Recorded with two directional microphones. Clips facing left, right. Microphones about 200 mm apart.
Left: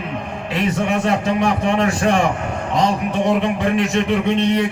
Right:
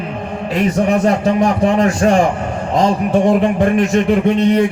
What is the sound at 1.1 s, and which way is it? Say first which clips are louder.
A man's voice: right 4 dB; 40° right (ahead or behind).